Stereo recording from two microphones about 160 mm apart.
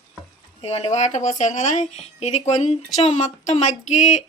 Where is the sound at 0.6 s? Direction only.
40° left (ahead or behind).